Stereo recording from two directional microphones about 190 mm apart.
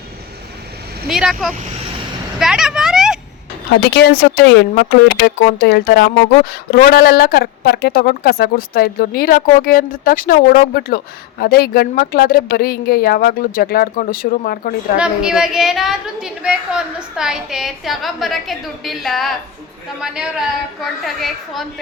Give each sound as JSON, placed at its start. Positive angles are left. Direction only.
{"t": 1.0, "sound": "a woman's voice", "side_deg": 0}
{"t": 2.4, "sound": "a sound", "side_deg": -5}
{"t": 3.9, "sound": "speech", "side_deg": 55}
{"t": 14.9, "sound": "a woman's voice", "side_deg": -5}
{"t": 21.0, "sound": "a woman's voice", "side_deg": 0}